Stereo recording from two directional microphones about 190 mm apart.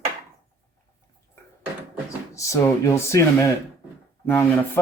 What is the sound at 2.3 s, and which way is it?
Speech, 15° left (ahead or behind).